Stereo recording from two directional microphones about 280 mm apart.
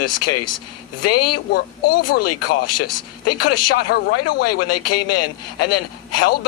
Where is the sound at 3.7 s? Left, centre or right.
Left.